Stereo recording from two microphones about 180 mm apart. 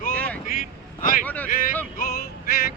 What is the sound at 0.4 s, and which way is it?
Vehicle, 45° left (ahead or behind).